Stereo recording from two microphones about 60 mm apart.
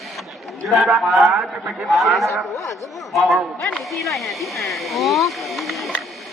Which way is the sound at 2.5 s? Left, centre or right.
Left.